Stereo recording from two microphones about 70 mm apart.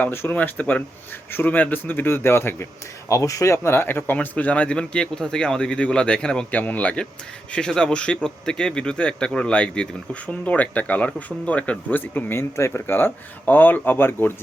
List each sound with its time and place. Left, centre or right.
0.0 s speech: left
3.1 s a man's voice: left